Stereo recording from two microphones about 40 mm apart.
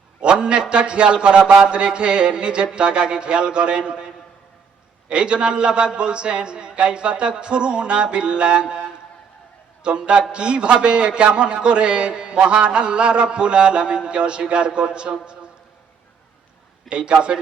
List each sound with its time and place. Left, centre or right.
0.2 s a man's voice: right
5.0 s a man's voice: right
16.9 s a man's voice: right